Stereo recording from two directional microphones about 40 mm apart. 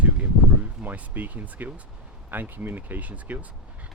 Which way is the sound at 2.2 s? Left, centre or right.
Right.